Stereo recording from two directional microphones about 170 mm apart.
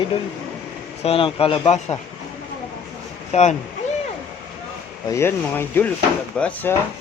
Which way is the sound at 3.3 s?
40° left (ahead or behind).